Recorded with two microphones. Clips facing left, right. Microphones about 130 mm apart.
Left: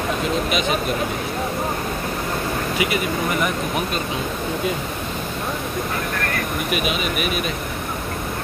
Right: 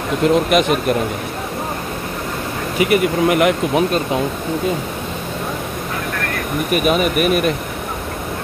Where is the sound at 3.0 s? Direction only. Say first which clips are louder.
Right 8 dB; 80° right.